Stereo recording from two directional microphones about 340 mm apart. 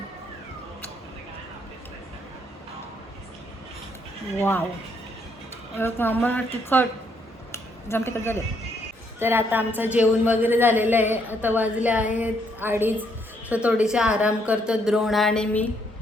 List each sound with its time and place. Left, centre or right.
4.4 s speech: centre
5.7 s a woman's voice: centre
7.5 s a sound: centre
9.1 s a woman's voice: centre